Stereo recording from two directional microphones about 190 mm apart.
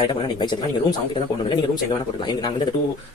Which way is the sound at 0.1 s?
25° left (ahead or behind).